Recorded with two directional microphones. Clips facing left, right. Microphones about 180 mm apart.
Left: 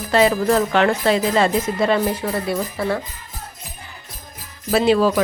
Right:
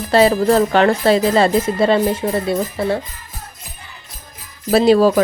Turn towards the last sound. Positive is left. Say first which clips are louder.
# right 4 dB
turn(degrees=-40)  # may be behind; listen again after turning